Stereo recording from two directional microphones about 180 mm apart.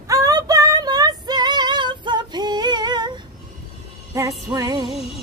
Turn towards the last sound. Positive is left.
turn(degrees=-20)  # may be behind; listen again after turning